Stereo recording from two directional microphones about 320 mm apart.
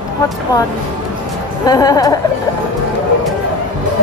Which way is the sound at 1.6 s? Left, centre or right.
Centre.